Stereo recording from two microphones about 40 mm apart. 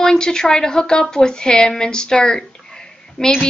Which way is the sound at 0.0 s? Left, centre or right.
Centre.